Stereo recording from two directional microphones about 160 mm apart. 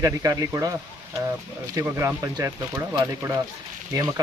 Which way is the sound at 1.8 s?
15° right (ahead or behind).